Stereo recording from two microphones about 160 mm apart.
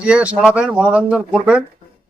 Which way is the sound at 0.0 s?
5° right (ahead or behind).